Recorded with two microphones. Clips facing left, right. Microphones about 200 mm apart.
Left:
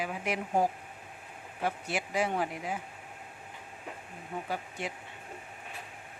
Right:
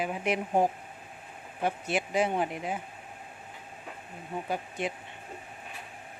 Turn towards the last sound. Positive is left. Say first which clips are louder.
# right 4 dB
turn(degrees=-20)  # may be behind; listen again after turning